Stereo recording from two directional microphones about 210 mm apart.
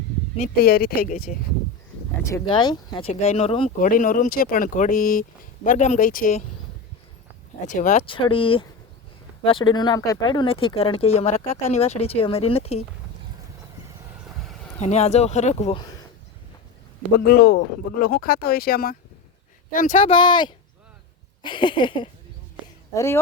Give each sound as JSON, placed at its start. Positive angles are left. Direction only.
{"t": 0.3, "sound": "speech", "side_deg": 40}
{"t": 2.3, "sound": "speech", "side_deg": 20}
{"t": 3.8, "sound": "speech", "side_deg": 40}
{"t": 7.7, "sound": "speech", "side_deg": 35}
{"t": 8.0, "sound": "speech", "side_deg": 25}
{"t": 14.8, "sound": "speech", "side_deg": 30}
{"t": 17.2, "sound": "speech", "side_deg": 45}
{"t": 19.9, "sound": "speech", "side_deg": 25}